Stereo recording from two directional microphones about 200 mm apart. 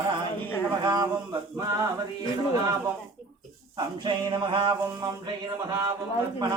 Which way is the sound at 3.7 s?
20° right (ahead or behind).